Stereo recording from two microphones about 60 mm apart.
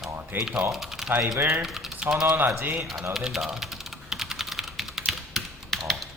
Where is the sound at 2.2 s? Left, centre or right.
Right.